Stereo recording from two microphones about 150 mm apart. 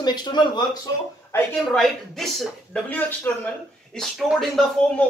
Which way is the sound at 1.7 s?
Centre (ahead or behind).